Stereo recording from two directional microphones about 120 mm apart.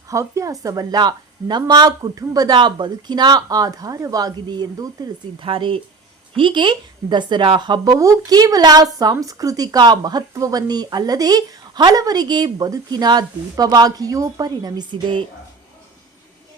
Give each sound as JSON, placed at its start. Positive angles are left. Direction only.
{"t": 0.1, "sound": "speech", "side_deg": -25}
{"t": 5.5, "sound": "speech", "side_deg": -45}